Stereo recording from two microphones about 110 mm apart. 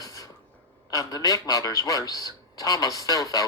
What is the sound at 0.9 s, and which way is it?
Speech, 30° left (ahead or behind).